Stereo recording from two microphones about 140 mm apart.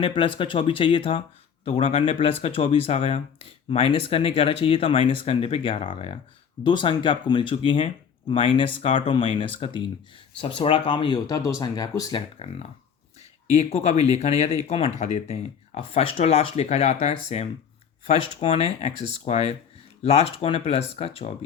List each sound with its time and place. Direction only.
0.0 s speech: 35° left (ahead or behind)
12.4 s speech: 40° left (ahead or behind)